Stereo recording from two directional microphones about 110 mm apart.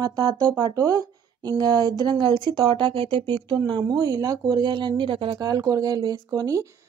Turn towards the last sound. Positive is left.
turn(degrees=-35)  # may be behind; listen again after turning